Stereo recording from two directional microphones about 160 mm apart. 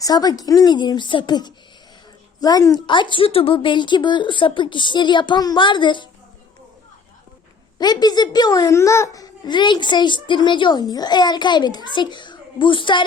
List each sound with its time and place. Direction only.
0.0 s a woman's voice: 25° left (ahead or behind)
7.8 s a woman's voice: 25° left (ahead or behind)